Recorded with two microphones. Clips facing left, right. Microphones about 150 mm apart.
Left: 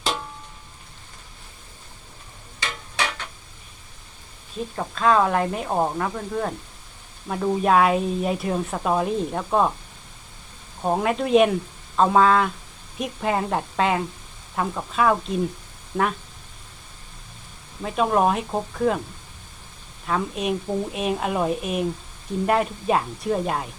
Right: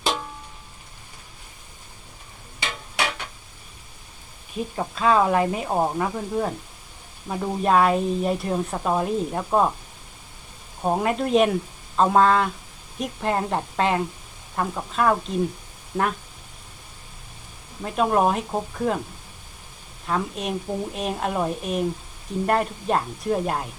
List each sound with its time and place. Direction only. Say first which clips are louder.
4.5 s speech: right 1 dB; 10° right (ahead or behind)
10.8 s speech: even; centre (ahead or behind)
17.8 s speech: even; centre (ahead or behind)
20.1 s speech: left 2 dB; centre (ahead or behind)